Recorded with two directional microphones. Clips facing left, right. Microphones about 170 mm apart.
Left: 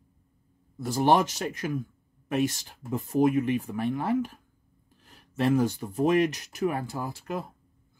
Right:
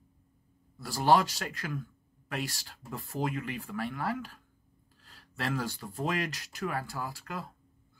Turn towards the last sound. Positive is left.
turn(degrees=20)  # may be behind; listen again after turning